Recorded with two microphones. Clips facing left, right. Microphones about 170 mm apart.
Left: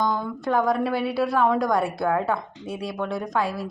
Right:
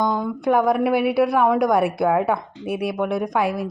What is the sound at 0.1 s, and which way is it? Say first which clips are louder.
A woman's voice: right 4 dB; 15° right (ahead or behind).